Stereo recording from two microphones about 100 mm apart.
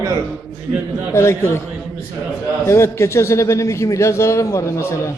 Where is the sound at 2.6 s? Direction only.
30° left (ahead or behind).